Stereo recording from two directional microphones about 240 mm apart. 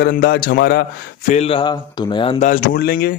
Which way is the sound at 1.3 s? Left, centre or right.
Left.